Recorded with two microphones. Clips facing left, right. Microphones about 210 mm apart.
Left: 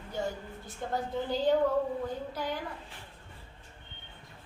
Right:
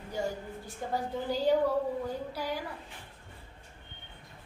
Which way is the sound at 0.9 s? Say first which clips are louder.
Even; 10° right (ahead or behind).